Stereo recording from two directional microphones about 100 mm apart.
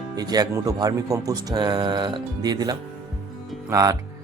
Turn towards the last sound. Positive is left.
turn(degrees=-35)  # may be behind; listen again after turning